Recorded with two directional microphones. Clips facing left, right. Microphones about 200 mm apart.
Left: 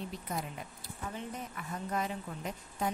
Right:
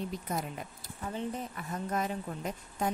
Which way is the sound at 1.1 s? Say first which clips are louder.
Right 7 dB; 40° right (ahead or behind).